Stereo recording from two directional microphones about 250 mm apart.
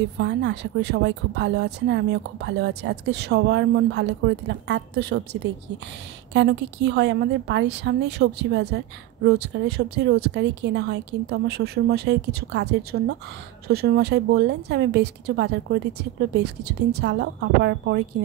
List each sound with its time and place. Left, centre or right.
0.2 s speech: right